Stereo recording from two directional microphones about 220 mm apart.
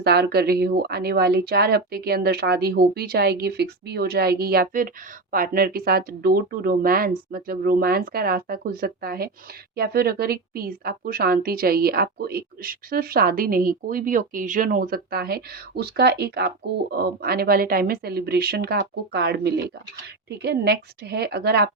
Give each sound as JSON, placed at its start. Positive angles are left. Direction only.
{"t": 0.0, "sound": "a woman's voice", "side_deg": -45}